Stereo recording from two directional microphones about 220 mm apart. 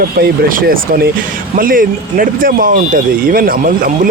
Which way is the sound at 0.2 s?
40° right (ahead or behind).